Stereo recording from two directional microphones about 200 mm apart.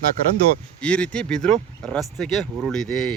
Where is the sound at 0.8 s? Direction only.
5° left (ahead or behind).